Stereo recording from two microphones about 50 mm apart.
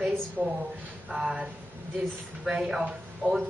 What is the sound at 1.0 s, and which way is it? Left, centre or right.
Speech, centre.